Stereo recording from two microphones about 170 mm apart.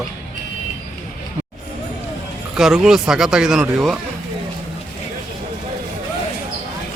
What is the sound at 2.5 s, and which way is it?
Speech, 5° right (ahead or behind).